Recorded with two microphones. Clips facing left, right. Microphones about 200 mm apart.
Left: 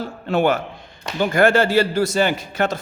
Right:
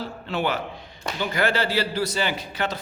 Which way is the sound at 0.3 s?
45° left (ahead or behind).